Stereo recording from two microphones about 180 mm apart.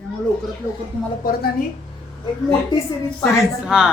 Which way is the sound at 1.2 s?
55° left (ahead or behind).